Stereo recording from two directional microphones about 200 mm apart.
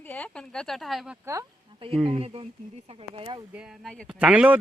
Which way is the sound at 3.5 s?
5° right (ahead or behind).